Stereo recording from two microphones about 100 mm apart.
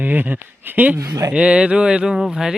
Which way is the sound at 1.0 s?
35° right (ahead or behind).